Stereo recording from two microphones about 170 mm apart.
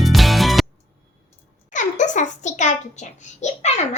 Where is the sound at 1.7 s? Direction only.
45° left (ahead or behind).